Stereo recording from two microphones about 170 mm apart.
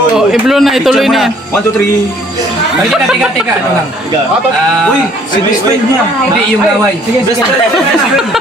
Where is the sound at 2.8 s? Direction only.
Centre (ahead or behind).